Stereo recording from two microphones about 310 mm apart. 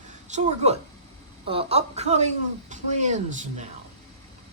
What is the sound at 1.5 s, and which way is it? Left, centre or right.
Speech, centre.